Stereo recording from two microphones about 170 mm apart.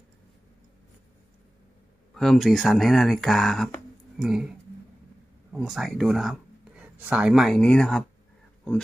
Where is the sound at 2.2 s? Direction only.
5° left (ahead or behind).